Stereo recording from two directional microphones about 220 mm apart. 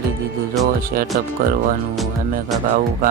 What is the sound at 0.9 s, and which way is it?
Music, 40° right (ahead or behind).